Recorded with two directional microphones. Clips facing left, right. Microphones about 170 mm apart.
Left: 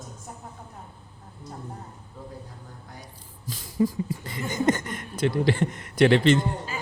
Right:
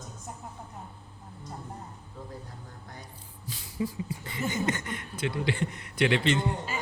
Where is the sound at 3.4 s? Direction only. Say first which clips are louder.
Left 8 dB; 45° left (ahead or behind).